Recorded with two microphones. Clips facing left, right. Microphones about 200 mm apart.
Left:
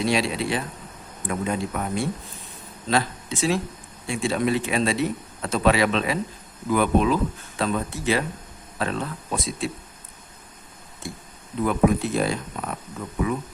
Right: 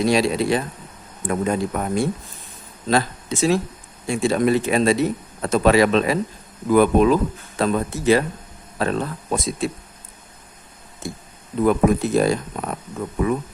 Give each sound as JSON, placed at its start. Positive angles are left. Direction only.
{"t": 0.0, "sound": "speech", "side_deg": -40}
{"t": 11.6, "sound": "speech", "side_deg": -45}